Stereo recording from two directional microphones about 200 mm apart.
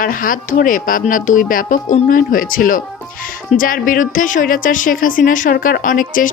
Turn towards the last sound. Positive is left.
turn(degrees=45)  # may be behind; listen again after turning